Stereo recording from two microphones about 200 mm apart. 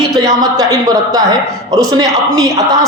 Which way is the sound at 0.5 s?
15° right (ahead or behind).